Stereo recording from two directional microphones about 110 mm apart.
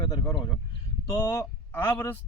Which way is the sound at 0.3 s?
40° left (ahead or behind).